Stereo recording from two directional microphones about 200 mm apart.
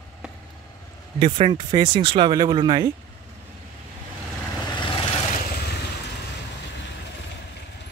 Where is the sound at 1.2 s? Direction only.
25° right (ahead or behind).